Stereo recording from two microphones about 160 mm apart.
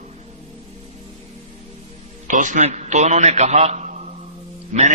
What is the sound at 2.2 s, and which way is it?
A man's voice, 50° right (ahead or behind).